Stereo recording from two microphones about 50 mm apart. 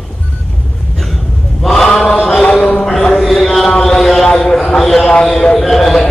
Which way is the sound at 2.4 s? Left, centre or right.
Centre.